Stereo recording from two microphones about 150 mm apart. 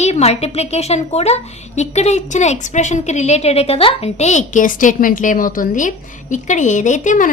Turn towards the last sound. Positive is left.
turn(degrees=60)  # may be behind; listen again after turning